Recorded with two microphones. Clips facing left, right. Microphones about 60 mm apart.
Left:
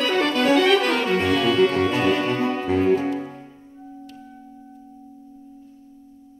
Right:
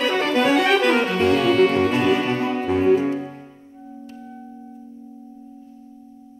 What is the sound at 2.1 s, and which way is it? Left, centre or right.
Music, right.